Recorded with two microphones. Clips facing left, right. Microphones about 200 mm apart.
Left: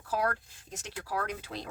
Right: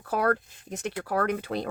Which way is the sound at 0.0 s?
60° right (ahead or behind).